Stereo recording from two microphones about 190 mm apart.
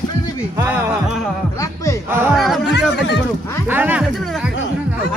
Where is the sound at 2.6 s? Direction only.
65° left (ahead or behind).